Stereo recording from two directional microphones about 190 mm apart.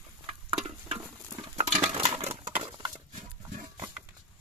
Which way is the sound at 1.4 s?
35° right (ahead or behind).